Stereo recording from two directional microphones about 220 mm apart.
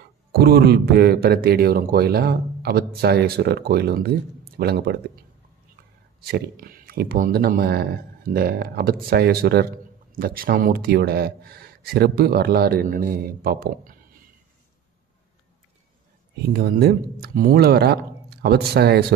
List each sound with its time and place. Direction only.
0.3 s a man's voice: 45° right (ahead or behind)
6.3 s a man's voice: 40° right (ahead or behind)
16.4 s a man's voice: 45° right (ahead or behind)